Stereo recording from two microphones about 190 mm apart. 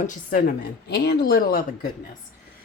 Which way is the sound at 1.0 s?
55° left (ahead or behind).